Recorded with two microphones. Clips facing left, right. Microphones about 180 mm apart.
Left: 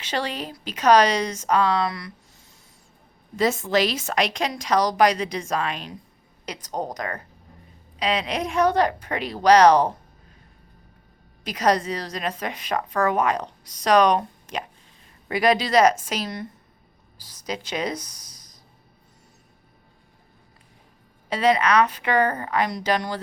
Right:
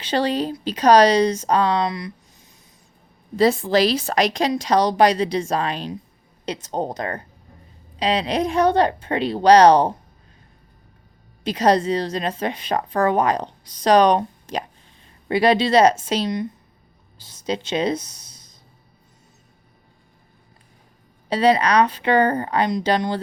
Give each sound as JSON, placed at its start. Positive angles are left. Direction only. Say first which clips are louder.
{"t": 0.0, "sound": "speech", "louder": "right 7 dB", "side_deg": -30}
{"t": 3.3, "sound": "a woman's voice", "louder": "right 4 dB", "side_deg": -35}
{"t": 11.4, "sound": "a woman's voice", "louder": "right 4 dB", "side_deg": -30}
{"t": 21.2, "sound": "a woman's voice", "louder": "right 3 dB", "side_deg": -30}